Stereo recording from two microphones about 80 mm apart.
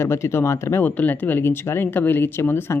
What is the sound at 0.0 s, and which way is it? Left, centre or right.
Speech, left.